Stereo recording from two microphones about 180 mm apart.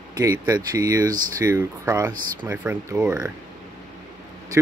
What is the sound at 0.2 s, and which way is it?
Speech, 20° right (ahead or behind).